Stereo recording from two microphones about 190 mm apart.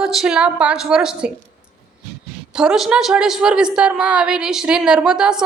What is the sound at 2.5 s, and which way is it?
A woman's voice, 5° right (ahead or behind).